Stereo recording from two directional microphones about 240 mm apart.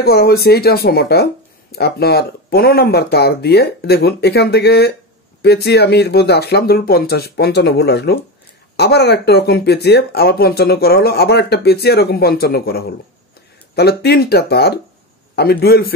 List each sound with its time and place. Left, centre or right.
0.0 s speech: left